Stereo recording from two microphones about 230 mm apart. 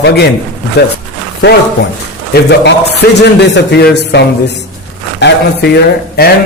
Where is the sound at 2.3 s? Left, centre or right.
Left.